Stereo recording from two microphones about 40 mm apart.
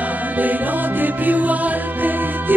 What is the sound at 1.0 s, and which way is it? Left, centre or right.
Music, right.